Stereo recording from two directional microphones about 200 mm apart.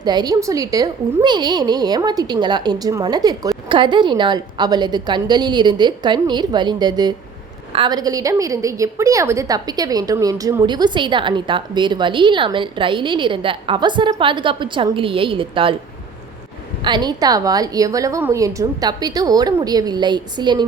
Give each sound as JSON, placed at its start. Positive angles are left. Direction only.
{"t": 0.0, "sound": "a woman's voice", "side_deg": -20}
{"t": 16.8, "sound": "a woman's voice", "side_deg": -20}